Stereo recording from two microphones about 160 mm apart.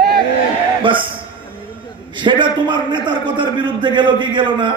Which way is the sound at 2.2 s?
30° right (ahead or behind).